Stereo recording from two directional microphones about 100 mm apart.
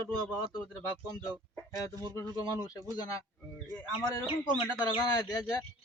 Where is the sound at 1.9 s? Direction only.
40° right (ahead or behind).